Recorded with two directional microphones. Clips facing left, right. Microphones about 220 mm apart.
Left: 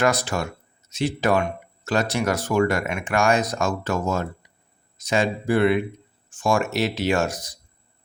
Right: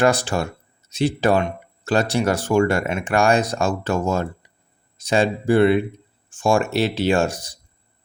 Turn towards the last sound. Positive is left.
turn(degrees=-30)  # may be behind; listen again after turning